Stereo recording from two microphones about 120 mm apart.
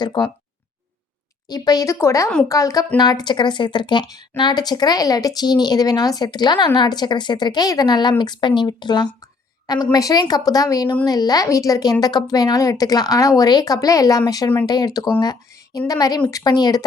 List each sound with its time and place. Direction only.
0.2 s speech: 40° left (ahead or behind)
1.5 s a woman's voice: 35° left (ahead or behind)